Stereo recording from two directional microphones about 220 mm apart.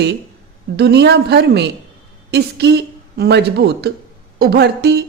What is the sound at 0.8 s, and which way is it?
Speech, 50° right (ahead or behind).